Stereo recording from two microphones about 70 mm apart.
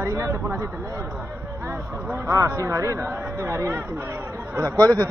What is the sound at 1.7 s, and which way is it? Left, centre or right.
A man's voice, right.